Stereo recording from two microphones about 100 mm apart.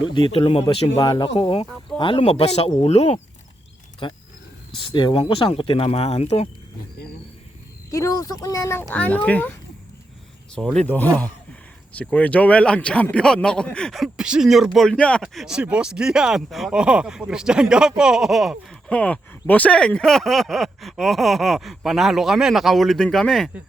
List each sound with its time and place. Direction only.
0.0 s speech: 50° left (ahead or behind); by 0.6 s 70° left (ahead or behind)
0.9 s speech: 50° left (ahead or behind); by 3.2 s 90° left
4.0 s speech: 55° left (ahead or behind)
5.2 s speech: 70° left (ahead or behind); by 6.5 s 90° left
7.9 s speech: 35° left (ahead or behind); by 10.8 s 5° left (ahead or behind)
10.8 s speech: 20° left (ahead or behind); by 14.9 s centre (ahead or behind)
14.9 s speech: 10° left (ahead or behind)
15.2 s speech: centre (ahead or behind)
18.9 s speech: 15° left (ahead or behind)